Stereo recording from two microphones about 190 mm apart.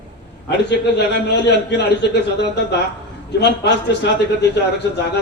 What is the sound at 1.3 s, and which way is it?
A man's voice, 65° left (ahead or behind).